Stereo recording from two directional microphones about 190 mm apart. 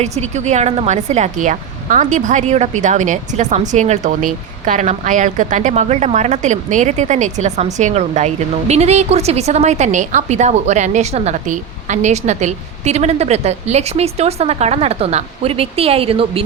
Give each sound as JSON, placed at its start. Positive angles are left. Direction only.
{"t": 0.2, "sound": "speech", "side_deg": -35}